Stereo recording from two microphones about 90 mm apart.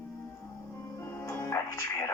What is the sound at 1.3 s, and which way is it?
Music, 30° left (ahead or behind).